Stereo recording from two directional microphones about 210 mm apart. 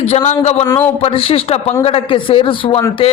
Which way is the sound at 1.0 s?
30° left (ahead or behind).